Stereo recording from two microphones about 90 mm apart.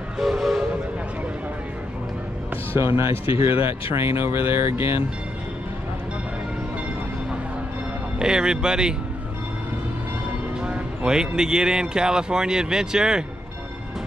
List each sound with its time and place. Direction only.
0.2 s train: 5° right (ahead or behind)
2.7 s speech: 30° right (ahead or behind)
8.2 s speech: 10° right (ahead or behind)
10.6 s speech: 10° right (ahead or behind)